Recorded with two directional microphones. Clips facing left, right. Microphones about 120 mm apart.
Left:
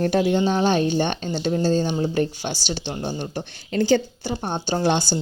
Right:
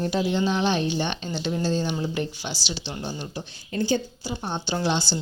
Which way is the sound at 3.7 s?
90° left.